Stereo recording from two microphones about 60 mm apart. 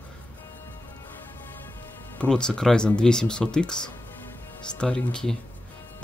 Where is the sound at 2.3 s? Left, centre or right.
Centre.